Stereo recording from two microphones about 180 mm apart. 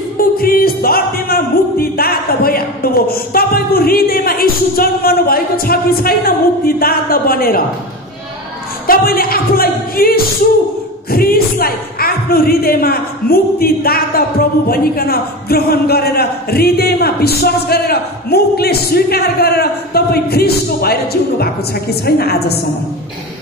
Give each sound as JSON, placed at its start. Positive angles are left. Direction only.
{"t": 0.2, "sound": "music", "side_deg": 55}
{"t": 8.8, "sound": "a woman's voice", "side_deg": 55}